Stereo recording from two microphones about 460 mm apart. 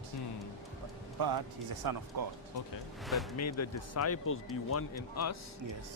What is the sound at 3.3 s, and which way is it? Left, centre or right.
A man's voice, left.